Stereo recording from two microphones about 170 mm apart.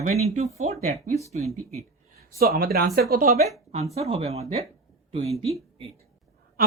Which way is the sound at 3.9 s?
35° right (ahead or behind).